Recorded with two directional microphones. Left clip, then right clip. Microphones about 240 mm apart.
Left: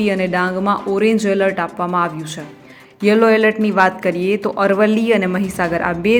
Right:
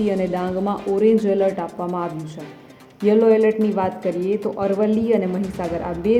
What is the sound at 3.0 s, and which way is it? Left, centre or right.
A woman's voice, centre.